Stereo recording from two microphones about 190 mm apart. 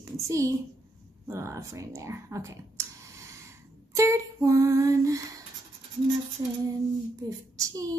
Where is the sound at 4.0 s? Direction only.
15° right (ahead or behind).